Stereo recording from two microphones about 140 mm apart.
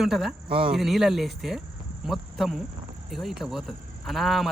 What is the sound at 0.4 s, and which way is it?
Speech, 40° right (ahead or behind).